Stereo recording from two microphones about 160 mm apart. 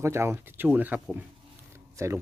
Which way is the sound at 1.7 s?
15° right (ahead or behind).